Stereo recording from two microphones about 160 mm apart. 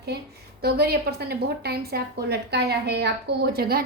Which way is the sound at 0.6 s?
80° right.